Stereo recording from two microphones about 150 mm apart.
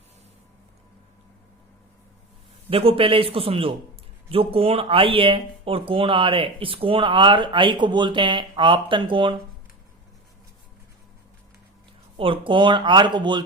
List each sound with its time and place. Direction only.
2.6 s speech: 40° right (ahead or behind)
12.1 s speech: 35° right (ahead or behind)